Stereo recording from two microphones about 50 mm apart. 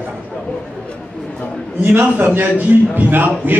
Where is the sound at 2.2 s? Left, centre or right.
Right.